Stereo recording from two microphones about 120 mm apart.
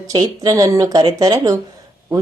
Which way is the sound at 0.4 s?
30° right (ahead or behind).